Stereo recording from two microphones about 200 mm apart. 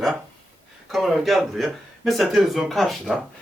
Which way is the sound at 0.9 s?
Centre (ahead or behind).